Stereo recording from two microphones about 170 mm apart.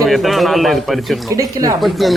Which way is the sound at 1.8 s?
Centre (ahead or behind).